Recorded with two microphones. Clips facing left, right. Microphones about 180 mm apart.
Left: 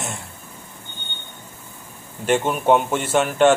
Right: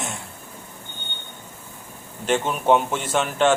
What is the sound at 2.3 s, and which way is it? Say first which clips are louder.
A man's voice: left 2 dB; 5° left (ahead or behind).